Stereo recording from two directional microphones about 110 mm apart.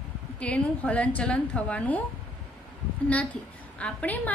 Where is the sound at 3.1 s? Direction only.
10° left (ahead or behind).